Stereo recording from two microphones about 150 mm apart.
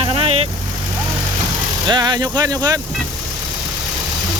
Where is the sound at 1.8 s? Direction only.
30° right (ahead or behind).